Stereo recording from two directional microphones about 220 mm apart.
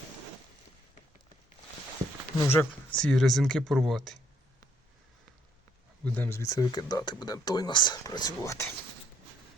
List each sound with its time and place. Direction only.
2.5 s speech: 5° left (ahead or behind)
6.1 s speech: 10° left (ahead or behind)